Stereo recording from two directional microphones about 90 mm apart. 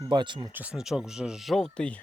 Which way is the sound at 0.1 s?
60° right (ahead or behind).